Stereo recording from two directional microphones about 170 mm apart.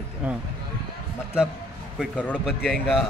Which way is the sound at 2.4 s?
Centre (ahead or behind).